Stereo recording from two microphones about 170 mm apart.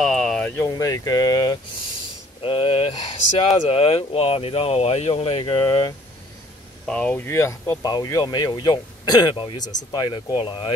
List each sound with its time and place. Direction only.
0.0 s a sound: centre (ahead or behind)
0.7 s speech: 20° left (ahead or behind)
6.9 s speech: 5° left (ahead or behind); by 10.7 s 30° left (ahead or behind)